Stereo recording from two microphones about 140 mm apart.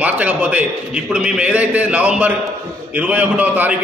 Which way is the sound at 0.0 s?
10° right (ahead or behind).